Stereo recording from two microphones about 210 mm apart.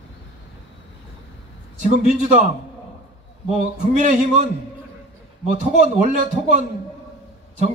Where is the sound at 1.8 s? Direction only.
35° right (ahead or behind).